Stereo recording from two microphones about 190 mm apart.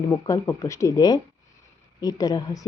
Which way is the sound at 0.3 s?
15° left (ahead or behind).